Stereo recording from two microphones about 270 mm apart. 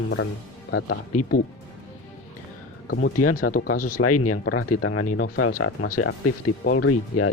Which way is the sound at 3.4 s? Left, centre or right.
Left.